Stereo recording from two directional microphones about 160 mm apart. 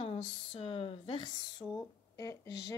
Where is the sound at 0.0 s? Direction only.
35° left (ahead or behind).